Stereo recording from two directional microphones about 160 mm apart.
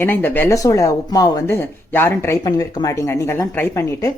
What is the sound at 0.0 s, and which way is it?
Speech, 10° left (ahead or behind).